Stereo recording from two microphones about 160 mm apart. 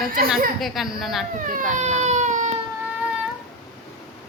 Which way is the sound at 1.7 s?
45° right (ahead or behind).